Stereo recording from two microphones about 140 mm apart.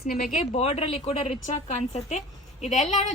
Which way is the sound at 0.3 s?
50° left (ahead or behind).